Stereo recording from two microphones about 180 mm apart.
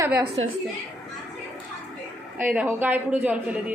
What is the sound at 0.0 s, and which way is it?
Speech, 15° right (ahead or behind).